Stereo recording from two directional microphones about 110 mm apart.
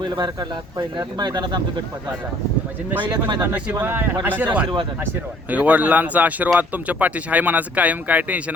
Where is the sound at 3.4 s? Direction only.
15° right (ahead or behind).